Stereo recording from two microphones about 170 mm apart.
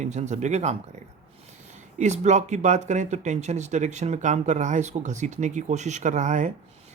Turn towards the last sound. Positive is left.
turn(degrees=-45)  # may be behind; listen again after turning